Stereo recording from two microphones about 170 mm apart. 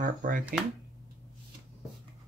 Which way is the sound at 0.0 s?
55° right (ahead or behind).